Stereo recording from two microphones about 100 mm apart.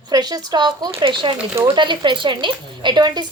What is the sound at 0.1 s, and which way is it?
A woman's voice, 40° right (ahead or behind).